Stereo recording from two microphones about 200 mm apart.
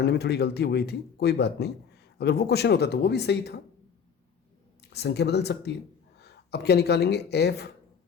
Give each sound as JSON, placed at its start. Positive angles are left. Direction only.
{"t": 0.0, "sound": "speech", "side_deg": 55}
{"t": 4.8, "sound": "speech", "side_deg": 55}